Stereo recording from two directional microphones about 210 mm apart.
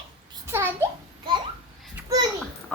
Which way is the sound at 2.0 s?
15° right (ahead or behind).